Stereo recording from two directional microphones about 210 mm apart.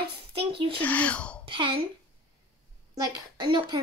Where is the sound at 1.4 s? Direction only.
25° right (ahead or behind).